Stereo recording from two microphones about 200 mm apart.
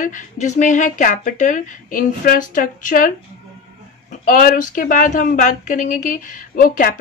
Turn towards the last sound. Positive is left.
turn(degrees=45)  # may be behind; listen again after turning